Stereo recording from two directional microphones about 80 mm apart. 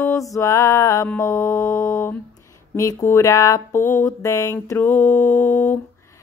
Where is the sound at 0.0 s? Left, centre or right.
Left.